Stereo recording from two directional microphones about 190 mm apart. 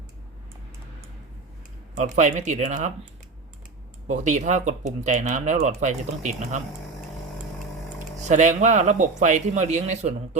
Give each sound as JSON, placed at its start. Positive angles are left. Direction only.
{"t": 2.0, "sound": "speech", "side_deg": -40}
{"t": 4.2, "sound": "speech", "side_deg": -40}
{"t": 8.2, "sound": "speech", "side_deg": -40}